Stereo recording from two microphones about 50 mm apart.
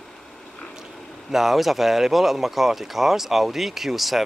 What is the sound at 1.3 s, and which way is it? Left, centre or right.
Speech, centre.